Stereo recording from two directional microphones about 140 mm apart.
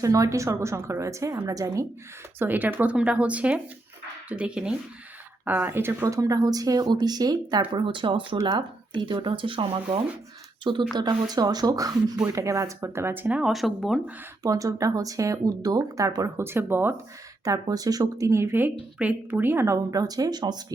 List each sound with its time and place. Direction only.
0.0 s speech: 25° right (ahead or behind); by 14.0 s centre (ahead or behind)
14.4 s speech: 25° right (ahead or behind)